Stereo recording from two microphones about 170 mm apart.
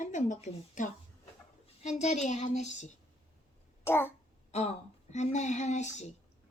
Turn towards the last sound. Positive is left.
turn(degrees=40)  # may be behind; listen again after turning